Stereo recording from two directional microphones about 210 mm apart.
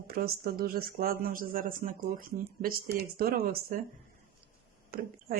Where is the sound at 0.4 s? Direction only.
45° right (ahead or behind).